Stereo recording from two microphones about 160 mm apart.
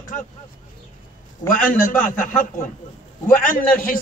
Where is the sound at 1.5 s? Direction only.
60° left (ahead or behind).